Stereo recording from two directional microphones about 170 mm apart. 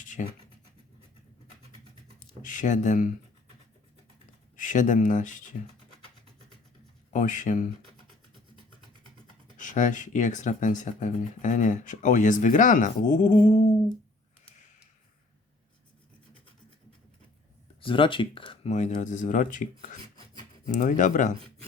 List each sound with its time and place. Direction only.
0.0 s scratch: 50° left (ahead or behind)
2.1 s speech: 50° left (ahead or behind)
4.5 s speech: 50° left (ahead or behind)
7.1 s speech: 50° left (ahead or behind)
9.6 s speech: 50° left (ahead or behind)
17.7 s speech: 30° left (ahead or behind); by 21.3 s 50° left (ahead or behind)